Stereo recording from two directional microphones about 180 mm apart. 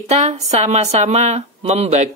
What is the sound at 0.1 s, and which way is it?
Speech, 40° right (ahead or behind).